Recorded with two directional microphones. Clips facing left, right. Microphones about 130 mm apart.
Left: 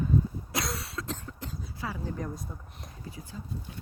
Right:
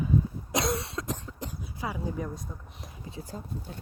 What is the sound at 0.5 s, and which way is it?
Cough, 20° right (ahead or behind).